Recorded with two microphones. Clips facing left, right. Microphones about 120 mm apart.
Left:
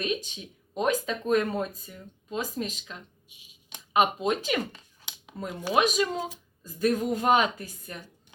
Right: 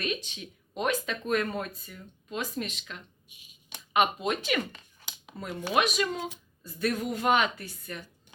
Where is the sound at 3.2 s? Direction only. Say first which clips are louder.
Left 1 dB; 50° right (ahead or behind).